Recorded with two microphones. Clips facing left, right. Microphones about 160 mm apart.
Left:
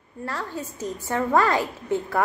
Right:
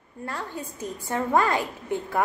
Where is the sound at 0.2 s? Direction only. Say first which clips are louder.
Left 2 dB; 15° right (ahead or behind).